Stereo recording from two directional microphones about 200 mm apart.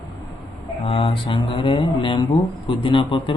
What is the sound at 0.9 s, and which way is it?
Speech, 25° left (ahead or behind).